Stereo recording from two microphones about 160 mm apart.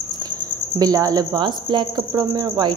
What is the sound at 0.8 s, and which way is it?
Speech, 25° right (ahead or behind).